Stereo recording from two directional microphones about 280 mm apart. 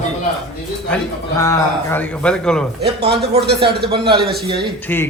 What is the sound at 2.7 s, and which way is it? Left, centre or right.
Speech, right.